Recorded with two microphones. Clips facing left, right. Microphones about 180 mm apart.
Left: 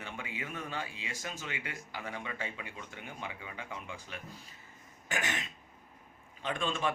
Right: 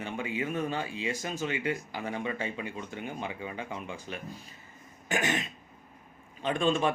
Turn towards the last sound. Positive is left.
turn(degrees=-25)  # may be behind; listen again after turning